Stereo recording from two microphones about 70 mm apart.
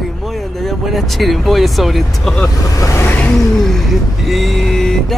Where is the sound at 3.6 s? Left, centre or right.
Centre.